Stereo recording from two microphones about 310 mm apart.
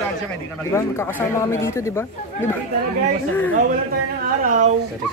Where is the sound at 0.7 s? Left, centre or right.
Centre.